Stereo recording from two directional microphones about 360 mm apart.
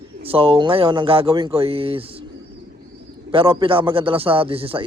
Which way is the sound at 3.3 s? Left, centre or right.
Centre.